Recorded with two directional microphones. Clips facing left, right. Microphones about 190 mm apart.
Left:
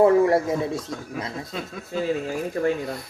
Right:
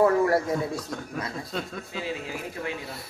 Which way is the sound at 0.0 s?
20° left (ahead or behind).